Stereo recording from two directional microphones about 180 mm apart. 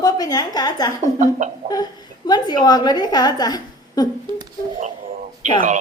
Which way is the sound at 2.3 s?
20° left (ahead or behind).